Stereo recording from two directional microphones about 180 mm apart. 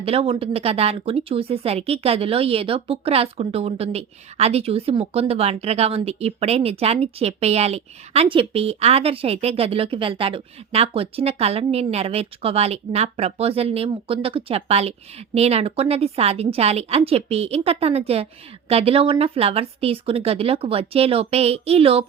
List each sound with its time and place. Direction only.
0.0 s speech: 30° right (ahead or behind)